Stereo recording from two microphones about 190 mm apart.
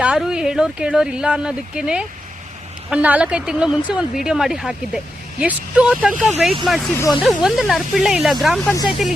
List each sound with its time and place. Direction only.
0.0 s speech: 5° right (ahead or behind)
6.9 s speech: 15° left (ahead or behind)
7.2 s speech: centre (ahead or behind)
8.7 s speech: 20° left (ahead or behind)